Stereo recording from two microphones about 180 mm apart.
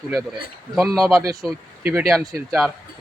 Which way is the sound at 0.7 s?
Centre (ahead or behind).